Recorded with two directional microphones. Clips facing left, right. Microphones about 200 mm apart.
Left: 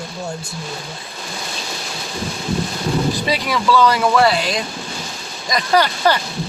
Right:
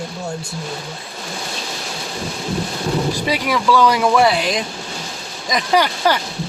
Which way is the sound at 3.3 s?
10° right (ahead or behind).